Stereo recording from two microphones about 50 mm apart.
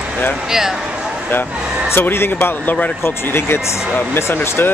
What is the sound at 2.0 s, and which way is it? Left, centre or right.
Speech, left.